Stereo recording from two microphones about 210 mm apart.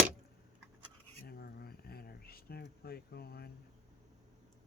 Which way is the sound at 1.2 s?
45° left (ahead or behind).